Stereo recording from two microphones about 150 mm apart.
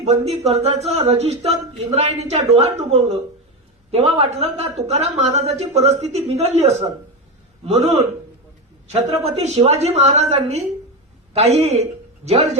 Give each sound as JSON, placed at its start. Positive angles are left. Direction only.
{"t": 0.0, "sound": "speech", "side_deg": -45}
{"t": 9.2, "sound": "a man's voice", "side_deg": -45}